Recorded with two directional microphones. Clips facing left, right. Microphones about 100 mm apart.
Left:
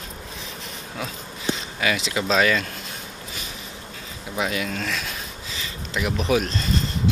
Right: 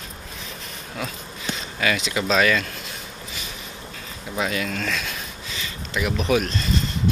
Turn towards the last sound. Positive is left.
turn(degrees=20)  # may be behind; listen again after turning